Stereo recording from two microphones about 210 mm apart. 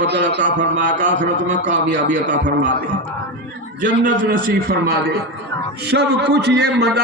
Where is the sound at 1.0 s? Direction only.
35° right (ahead or behind).